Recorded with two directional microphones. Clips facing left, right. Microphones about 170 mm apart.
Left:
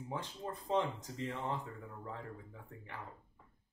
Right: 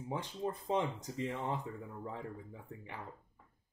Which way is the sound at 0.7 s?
15° right (ahead or behind).